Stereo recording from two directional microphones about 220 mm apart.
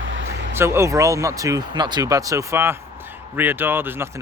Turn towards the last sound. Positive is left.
turn(degrees=-10)  # may be behind; listen again after turning